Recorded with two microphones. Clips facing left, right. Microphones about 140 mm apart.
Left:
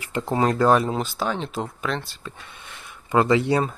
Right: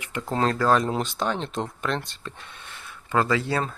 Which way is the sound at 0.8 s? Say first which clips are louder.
Left 1 dB; centre (ahead or behind).